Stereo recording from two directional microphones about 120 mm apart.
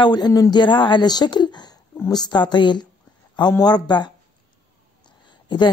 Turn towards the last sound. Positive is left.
turn(degrees=40)  # may be behind; listen again after turning